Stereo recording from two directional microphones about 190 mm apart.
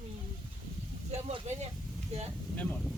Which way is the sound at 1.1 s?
35° right (ahead or behind).